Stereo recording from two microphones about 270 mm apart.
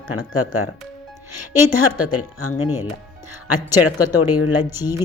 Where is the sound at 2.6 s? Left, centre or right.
Centre.